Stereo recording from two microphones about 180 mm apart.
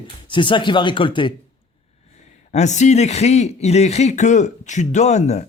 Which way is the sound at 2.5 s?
40° left (ahead or behind).